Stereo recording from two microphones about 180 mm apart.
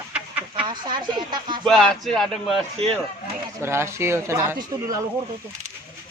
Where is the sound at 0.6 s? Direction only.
25° right (ahead or behind).